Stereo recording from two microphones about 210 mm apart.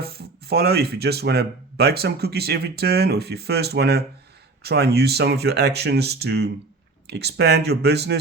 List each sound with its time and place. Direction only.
0.0 s speech: 50° right (ahead or behind)